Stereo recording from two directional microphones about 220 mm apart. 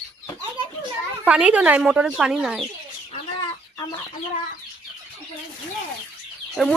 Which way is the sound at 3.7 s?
20° left (ahead or behind).